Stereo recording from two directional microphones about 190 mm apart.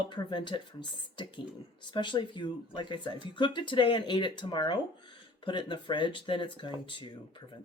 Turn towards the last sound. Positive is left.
turn(degrees=25)  # may be behind; listen again after turning